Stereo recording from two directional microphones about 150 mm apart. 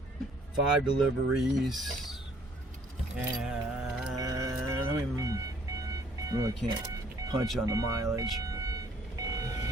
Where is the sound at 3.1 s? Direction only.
5° right (ahead or behind).